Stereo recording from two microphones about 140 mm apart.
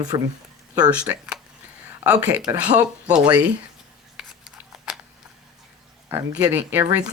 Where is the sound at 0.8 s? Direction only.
10° right (ahead or behind).